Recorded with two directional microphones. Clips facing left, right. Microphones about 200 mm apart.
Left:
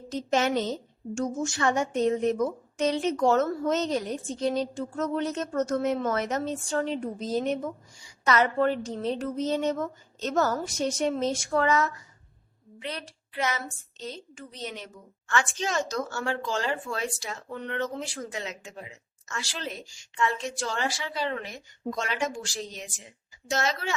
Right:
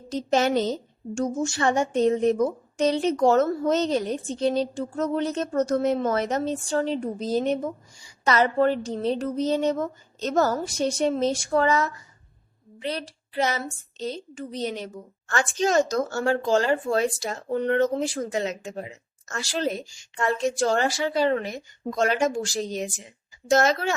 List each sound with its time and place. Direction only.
0.1 s a woman's voice: 35° right (ahead or behind)